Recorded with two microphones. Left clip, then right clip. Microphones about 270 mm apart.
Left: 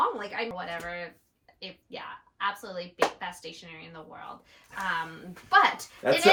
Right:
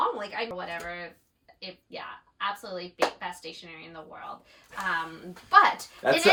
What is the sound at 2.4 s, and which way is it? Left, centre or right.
A woman's voice, centre.